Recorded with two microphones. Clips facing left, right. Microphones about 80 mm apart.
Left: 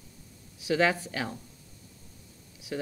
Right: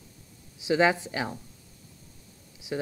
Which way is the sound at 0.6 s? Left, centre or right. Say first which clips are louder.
Right 3 dB; centre.